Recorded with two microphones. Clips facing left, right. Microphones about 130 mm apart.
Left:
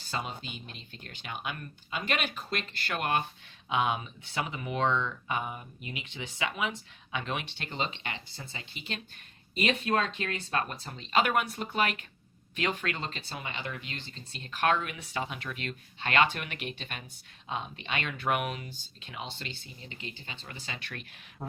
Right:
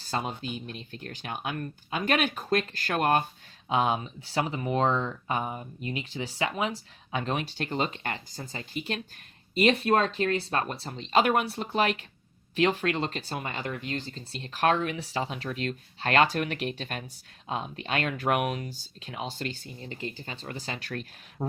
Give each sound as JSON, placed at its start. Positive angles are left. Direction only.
{"t": 0.0, "sound": "speech", "side_deg": -40}